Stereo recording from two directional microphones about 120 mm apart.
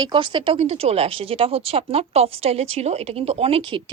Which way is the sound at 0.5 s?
60° right (ahead or behind).